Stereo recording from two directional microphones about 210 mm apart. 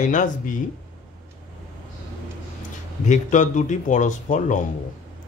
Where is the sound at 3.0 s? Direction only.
35° left (ahead or behind).